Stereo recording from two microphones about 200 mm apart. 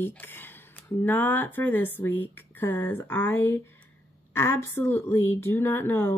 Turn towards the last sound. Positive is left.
turn(degrees=10)  # may be behind; listen again after turning